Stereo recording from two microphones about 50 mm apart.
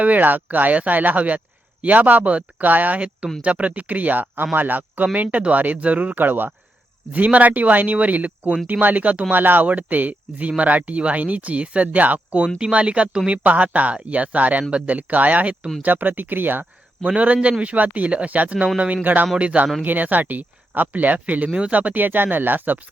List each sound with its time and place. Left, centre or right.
0.0 s speech: right
17.0 s speech: right
19.4 s speech: right
19.8 s speech: right